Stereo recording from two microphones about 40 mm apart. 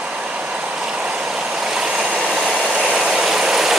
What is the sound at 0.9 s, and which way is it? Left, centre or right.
Vehicle, right.